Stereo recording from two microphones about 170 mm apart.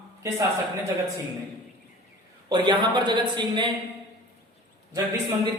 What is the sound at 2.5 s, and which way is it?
A woman's voice, 25° right (ahead or behind).